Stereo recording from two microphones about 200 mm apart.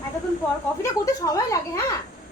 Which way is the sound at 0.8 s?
15° left (ahead or behind).